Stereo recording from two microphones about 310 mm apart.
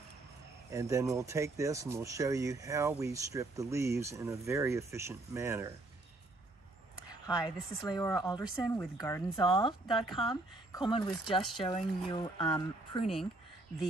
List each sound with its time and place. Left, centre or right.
0.7 s speech: centre
7.2 s speech: centre